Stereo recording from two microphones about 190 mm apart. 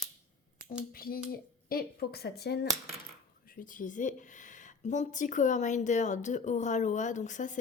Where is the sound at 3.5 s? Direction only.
45° left (ahead or behind).